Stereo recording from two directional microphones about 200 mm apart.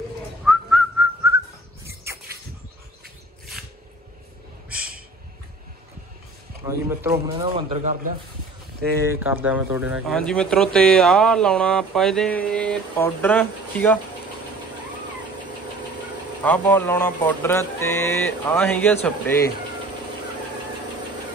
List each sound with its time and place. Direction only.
0.5 s whistling: centre (ahead or behind)
4.6 s a sound: 5° right (ahead or behind)
6.6 s speech: 15° right (ahead or behind)
7.3 s speech: 30° right (ahead or behind)
9.3 s speech: 5° right (ahead or behind)
16.4 s speech: 10° left (ahead or behind)